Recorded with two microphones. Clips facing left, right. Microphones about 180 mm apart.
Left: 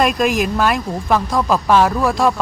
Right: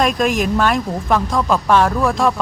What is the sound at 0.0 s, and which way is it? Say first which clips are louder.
Speech: left 1 dB; centre (ahead or behind).